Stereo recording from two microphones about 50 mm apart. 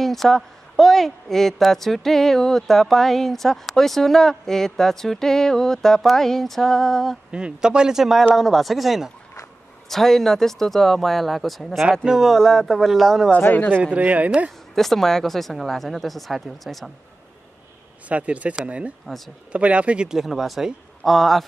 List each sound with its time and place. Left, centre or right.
0.0 s a woman's voice: centre
7.2 s a man's voice: centre
9.8 s a woman's voice: centre
13.4 s speech: left
13.9 s speech: right
14.8 s a woman's voice: centre
18.0 s speech: right
19.0 s a woman's voice: centre
19.5 s speech: right
20.1 s a woman's voice: centre